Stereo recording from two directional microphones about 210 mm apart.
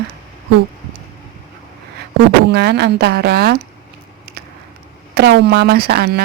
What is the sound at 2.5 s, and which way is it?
Speech, 50° right (ahead or behind).